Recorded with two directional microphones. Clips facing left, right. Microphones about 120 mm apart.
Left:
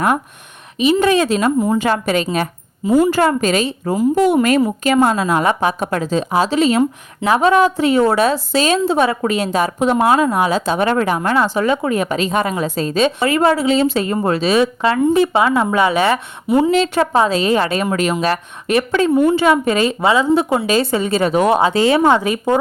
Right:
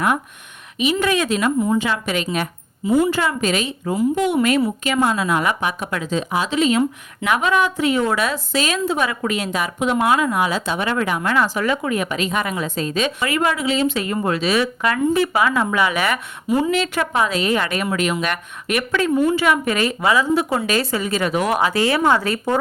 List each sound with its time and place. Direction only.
0.8 s a woman's voice: 35° left (ahead or behind); by 22.5 s 15° left (ahead or behind)